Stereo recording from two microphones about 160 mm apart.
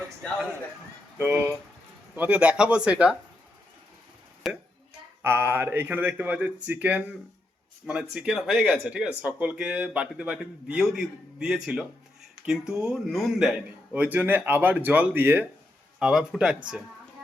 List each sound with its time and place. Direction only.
2.1 s speech: 10° right (ahead or behind)
4.4 s a sound: centre (ahead or behind)
5.2 s speech: 15° right (ahead or behind)
8.1 s speech: 5° right (ahead or behind)
16.0 s speech: 5° right (ahead or behind)